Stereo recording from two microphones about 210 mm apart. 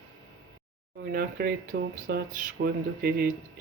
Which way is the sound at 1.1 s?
45° right (ahead or behind).